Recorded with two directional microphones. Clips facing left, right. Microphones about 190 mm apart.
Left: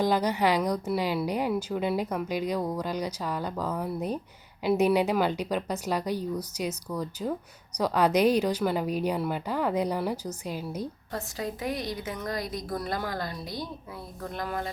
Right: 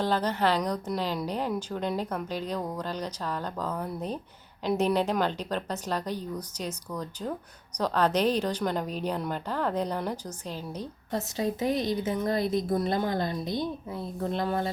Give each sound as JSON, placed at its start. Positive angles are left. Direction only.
{"t": 0.0, "sound": "a woman's voice", "side_deg": 10}
{"t": 11.1, "sound": "a woman's voice", "side_deg": -20}